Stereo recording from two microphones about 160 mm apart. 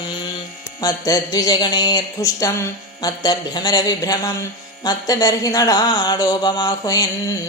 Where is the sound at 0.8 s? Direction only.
20° left (ahead or behind).